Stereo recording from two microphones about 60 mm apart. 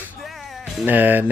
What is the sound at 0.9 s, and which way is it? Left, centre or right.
Speech, right.